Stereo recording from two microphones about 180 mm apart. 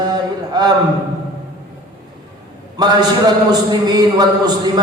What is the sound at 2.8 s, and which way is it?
Speech, 20° right (ahead or behind).